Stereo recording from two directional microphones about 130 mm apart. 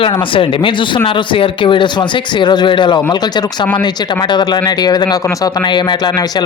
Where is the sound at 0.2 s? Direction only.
40° left (ahead or behind).